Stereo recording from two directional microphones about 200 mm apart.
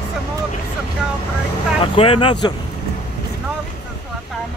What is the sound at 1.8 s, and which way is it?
Speech, 25° left (ahead or behind).